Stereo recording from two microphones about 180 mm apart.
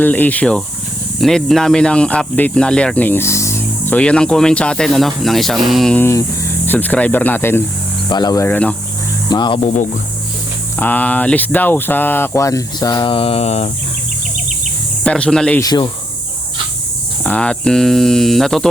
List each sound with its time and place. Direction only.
0.0 s speech: 10° left (ahead or behind)
9.3 s speech: 25° left (ahead or behind)
9.6 s speech: 45° left (ahead or behind)
10.8 s speech: 10° left (ahead or behind); by 13.7 s 35° left (ahead or behind)
15.0 s speech: 5° left (ahead or behind)
15.6 s speech: 25° left (ahead or behind)
17.2 s speech: 5° left (ahead or behind)